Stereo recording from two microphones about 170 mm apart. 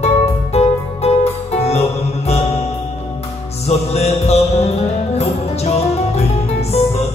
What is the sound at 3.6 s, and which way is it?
Music, 40° left (ahead or behind).